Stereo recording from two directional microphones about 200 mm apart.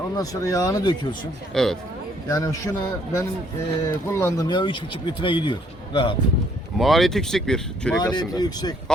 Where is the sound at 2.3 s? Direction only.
15° left (ahead or behind).